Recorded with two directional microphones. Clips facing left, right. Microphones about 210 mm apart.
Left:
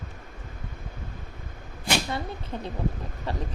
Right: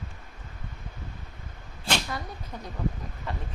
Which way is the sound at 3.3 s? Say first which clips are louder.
Left 4 dB; 35° left (ahead or behind).